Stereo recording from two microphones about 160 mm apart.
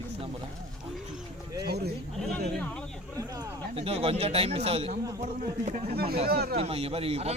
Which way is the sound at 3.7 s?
35° right (ahead or behind).